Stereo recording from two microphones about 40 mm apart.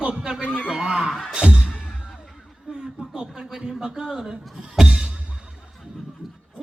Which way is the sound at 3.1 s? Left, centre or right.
Centre.